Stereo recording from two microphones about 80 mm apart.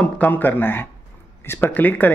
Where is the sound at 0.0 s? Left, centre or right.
Left.